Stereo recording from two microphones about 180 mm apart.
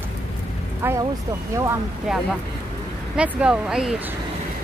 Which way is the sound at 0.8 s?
15° right (ahead or behind).